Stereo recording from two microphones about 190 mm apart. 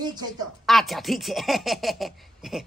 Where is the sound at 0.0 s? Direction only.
20° right (ahead or behind).